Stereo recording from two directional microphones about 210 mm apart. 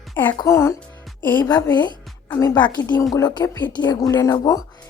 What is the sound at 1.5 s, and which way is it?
Speech, 20° left (ahead or behind).